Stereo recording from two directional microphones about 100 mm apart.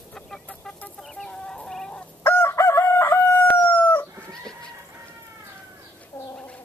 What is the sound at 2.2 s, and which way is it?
Chicken, 20° left (ahead or behind).